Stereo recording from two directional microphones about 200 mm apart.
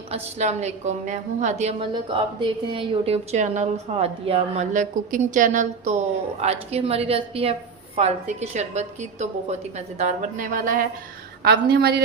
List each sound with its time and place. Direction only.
0.1 s a woman's voice: 35° right (ahead or behind)
11.4 s a woman's voice: 55° right (ahead or behind)